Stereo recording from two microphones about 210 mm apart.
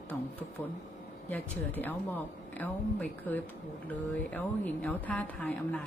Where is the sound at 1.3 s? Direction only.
10° left (ahead or behind).